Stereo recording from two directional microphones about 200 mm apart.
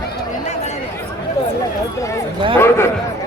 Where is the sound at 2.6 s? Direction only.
10° left (ahead or behind).